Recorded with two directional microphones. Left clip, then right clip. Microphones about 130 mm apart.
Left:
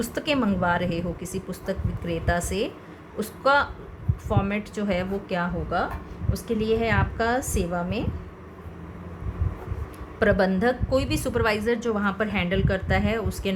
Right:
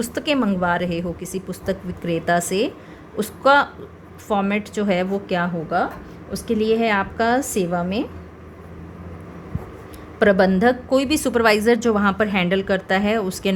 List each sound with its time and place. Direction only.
0.0 s a woman's voice: 50° right (ahead or behind)
10.2 s a woman's voice: 45° right (ahead or behind)